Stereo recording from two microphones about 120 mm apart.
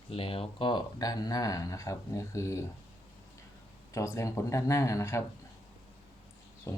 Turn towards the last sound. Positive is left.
turn(degrees=25)  # may be behind; listen again after turning